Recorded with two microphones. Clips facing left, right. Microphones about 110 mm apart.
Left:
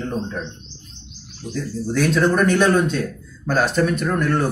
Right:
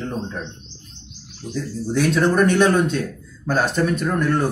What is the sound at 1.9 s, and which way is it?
Speech, 20° right (ahead or behind).